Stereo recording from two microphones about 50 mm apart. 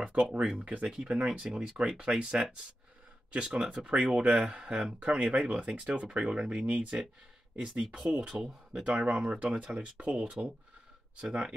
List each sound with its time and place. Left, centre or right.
0.6 s speech: right
8.3 s speech: centre